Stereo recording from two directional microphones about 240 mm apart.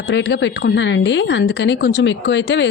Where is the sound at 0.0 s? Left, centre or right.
Left.